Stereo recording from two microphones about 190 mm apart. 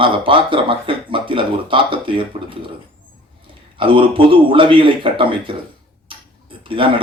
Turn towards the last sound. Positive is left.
turn(degrees=-25)  # may be behind; listen again after turning